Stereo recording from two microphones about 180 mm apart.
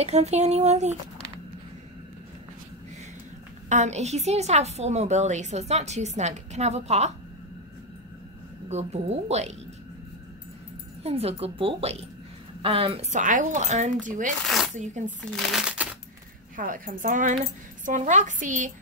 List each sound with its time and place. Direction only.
0.0 s a woman's voice: 35° right (ahead or behind)
3.6 s a woman's voice: 40° right (ahead or behind)
8.6 s a woman's voice: 40° right (ahead or behind)
11.0 s a woman's voice: 35° right (ahead or behind)
13.1 s speech: 45° right (ahead or behind)
14.4 s speech: centre (ahead or behind)
16.5 s speech: 50° right (ahead or behind)